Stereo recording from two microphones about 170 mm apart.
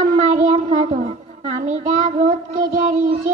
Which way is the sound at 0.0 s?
40° right (ahead or behind).